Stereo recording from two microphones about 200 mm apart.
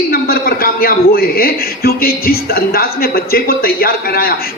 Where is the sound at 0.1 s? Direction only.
50° left (ahead or behind).